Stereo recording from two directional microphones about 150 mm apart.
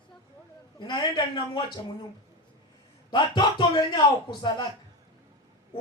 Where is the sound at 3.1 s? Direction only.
30° left (ahead or behind).